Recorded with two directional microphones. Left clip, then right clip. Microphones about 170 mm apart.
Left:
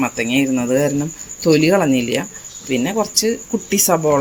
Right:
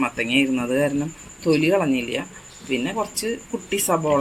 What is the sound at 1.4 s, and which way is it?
Speech, 55° left (ahead or behind).